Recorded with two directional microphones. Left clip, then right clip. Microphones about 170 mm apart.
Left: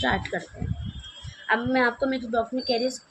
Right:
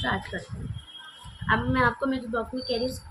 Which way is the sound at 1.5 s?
30° left (ahead or behind).